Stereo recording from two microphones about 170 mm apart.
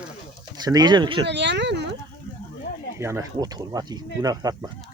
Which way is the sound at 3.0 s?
15° right (ahead or behind).